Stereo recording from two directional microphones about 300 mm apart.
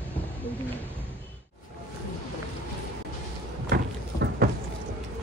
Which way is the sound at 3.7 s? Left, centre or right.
Right.